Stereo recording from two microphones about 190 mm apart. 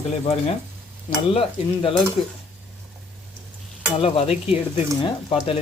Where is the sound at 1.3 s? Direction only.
30° left (ahead or behind).